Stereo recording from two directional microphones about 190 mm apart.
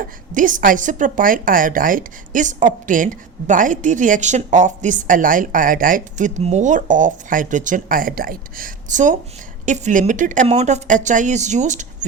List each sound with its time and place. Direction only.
0.0 s a woman's voice: 45° right (ahead or behind)